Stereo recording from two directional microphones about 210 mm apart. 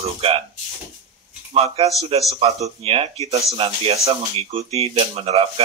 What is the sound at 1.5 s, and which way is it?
Speech, 30° right (ahead or behind).